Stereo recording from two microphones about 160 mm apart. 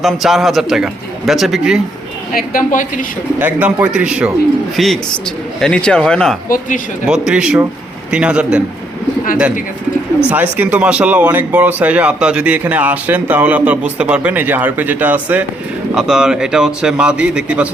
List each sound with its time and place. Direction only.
0.0 s a man's voice: centre (ahead or behind)
2.3 s a woman's voice: 60° left (ahead or behind)
3.3 s speech: 10° right (ahead or behind)
4.8 s a man's voice: 5° left (ahead or behind)
6.5 s a woman's voice: 55° left (ahead or behind)
7.0 s a man's voice: 5° right (ahead or behind)
10.2 s a man's voice: 10° right (ahead or behind)